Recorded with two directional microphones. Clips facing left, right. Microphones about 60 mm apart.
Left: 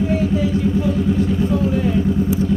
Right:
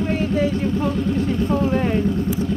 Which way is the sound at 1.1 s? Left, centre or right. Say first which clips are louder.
Left 3 dB; centre.